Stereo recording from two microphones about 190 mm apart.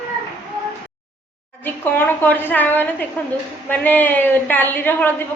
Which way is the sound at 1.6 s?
10° left (ahead or behind).